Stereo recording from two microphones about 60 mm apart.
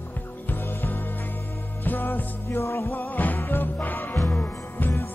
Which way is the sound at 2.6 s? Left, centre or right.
Left.